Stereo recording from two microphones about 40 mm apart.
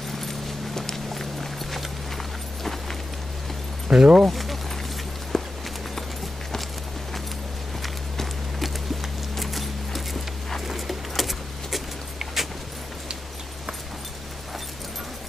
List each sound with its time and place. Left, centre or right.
0.2 s clip-clop: centre
2.6 s vehicle: centre
3.9 s speech: right
4.3 s a sound: centre
5.3 s walk: centre
7.8 s walk: centre
9.4 s a sound: centre
10.7 s keys jangling: centre